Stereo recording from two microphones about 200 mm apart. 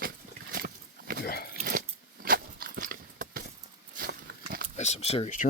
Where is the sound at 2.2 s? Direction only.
45° right (ahead or behind).